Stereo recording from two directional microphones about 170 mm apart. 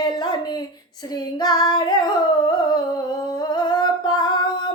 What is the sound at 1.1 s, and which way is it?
Female singing, 25° left (ahead or behind).